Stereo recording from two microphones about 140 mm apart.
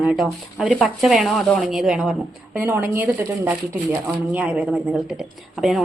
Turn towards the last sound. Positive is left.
turn(degrees=0)  # may be behind; listen again after turning